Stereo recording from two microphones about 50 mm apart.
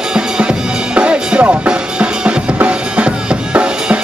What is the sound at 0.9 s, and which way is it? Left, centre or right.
Music, right.